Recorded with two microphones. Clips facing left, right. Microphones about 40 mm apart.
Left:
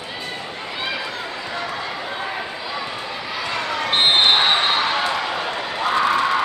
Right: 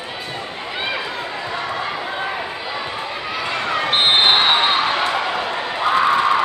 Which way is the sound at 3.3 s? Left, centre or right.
Right.